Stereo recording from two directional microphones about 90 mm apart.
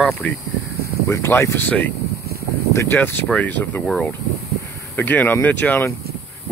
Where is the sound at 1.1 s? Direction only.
25° left (ahead or behind).